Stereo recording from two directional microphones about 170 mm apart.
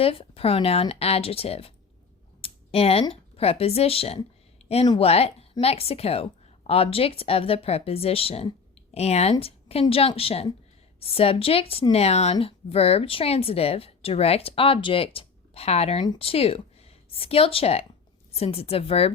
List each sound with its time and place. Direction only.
0.0 s speech: 35° left (ahead or behind)